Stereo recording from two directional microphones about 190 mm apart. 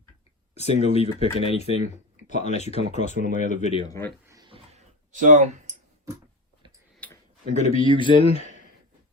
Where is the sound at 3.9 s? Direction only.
15° left (ahead or behind).